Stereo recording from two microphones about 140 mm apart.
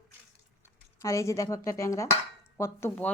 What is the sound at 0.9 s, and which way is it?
A woman's voice, 20° left (ahead or behind).